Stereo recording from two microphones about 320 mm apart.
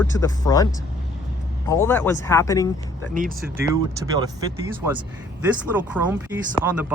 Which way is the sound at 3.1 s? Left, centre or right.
Right.